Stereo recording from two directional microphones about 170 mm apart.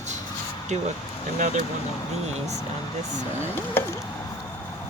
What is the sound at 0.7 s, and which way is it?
Speech, 45° right (ahead or behind).